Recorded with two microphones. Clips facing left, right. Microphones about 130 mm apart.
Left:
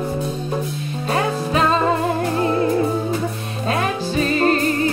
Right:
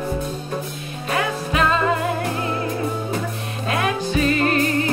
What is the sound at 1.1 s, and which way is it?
Music, 30° left (ahead or behind).